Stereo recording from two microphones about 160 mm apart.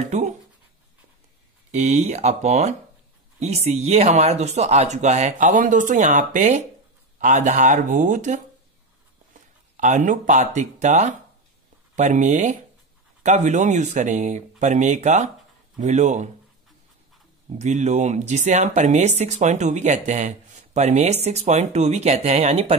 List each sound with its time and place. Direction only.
0.0 s speech: 45° right (ahead or behind)
1.7 s speech: 45° right (ahead or behind)
17.6 s speech: 45° right (ahead or behind)